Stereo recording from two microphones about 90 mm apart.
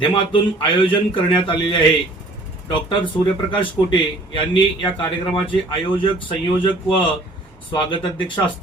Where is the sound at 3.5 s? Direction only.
60° left (ahead or behind).